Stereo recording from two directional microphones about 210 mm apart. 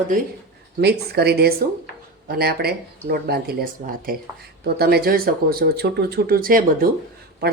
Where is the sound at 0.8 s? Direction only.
50° right (ahead or behind).